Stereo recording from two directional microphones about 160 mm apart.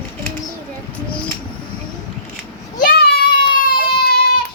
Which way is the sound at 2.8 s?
75° left (ahead or behind).